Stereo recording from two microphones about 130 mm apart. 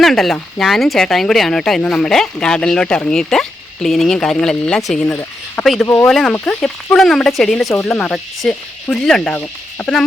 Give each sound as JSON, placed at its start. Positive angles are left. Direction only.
{"t": 0.0, "sound": "speech", "side_deg": 0}
{"t": 6.1, "sound": "speech", "side_deg": 5}